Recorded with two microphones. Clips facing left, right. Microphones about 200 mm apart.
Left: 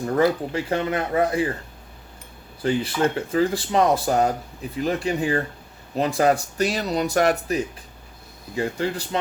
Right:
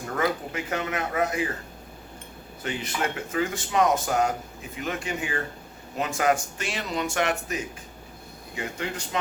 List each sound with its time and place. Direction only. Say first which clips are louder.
0.1 s speech: left 6 dB; 30° left (ahead or behind)
2.6 s speech: left 8 dB; 30° left (ahead or behind)